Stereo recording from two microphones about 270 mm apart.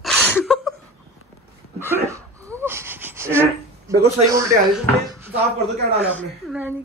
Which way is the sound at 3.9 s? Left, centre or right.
Centre.